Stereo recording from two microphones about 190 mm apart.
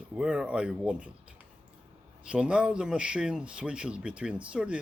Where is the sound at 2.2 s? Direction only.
5° right (ahead or behind).